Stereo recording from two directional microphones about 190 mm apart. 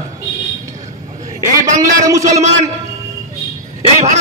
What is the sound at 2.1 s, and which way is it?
Speech, 15° right (ahead or behind).